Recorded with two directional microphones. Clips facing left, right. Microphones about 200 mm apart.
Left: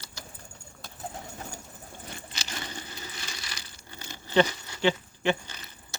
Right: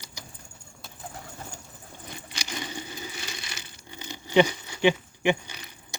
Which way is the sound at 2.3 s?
15° right (ahead or behind).